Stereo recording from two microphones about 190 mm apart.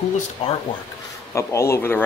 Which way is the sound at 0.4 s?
30° left (ahead or behind).